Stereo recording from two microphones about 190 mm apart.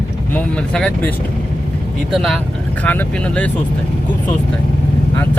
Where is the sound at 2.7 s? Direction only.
10° left (ahead or behind).